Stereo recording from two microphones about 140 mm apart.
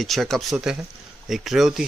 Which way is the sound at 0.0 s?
Centre (ahead or behind).